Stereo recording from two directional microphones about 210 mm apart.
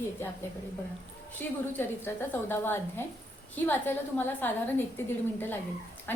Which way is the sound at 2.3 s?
10° left (ahead or behind).